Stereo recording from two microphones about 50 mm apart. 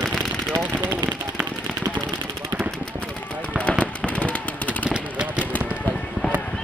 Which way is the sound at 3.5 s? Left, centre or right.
Left.